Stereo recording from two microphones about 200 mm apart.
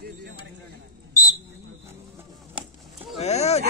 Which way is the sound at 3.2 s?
35° left (ahead or behind).